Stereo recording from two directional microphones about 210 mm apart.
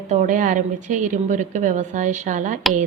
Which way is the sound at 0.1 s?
35° right (ahead or behind).